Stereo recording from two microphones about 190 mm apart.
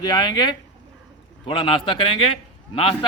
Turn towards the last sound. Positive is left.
turn(degrees=30)  # may be behind; listen again after turning